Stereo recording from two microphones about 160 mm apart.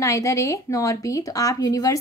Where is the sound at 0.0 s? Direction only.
20° left (ahead or behind).